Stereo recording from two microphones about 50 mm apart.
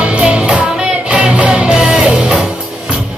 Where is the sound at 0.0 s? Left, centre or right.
Right.